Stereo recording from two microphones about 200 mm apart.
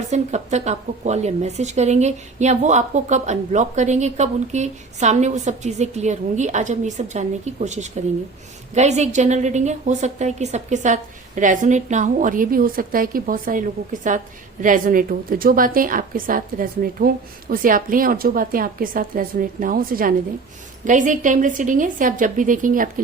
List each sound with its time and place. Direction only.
0.1 s a woman's voice: 35° right (ahead or behind)